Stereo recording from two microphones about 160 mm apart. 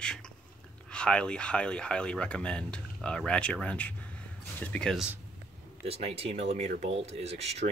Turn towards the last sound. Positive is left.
turn(degrees=-40)  # may be behind; listen again after turning